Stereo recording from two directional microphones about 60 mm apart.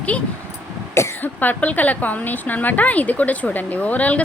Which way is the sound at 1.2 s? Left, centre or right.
Left.